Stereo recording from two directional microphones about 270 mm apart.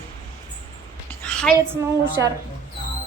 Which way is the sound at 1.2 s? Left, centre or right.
Centre.